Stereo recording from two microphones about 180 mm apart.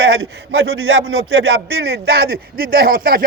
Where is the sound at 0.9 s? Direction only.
65° right (ahead or behind).